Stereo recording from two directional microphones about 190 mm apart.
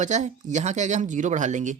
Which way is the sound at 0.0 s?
40° right (ahead or behind).